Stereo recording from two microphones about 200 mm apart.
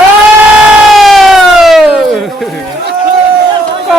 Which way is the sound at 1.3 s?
Centre (ahead or behind).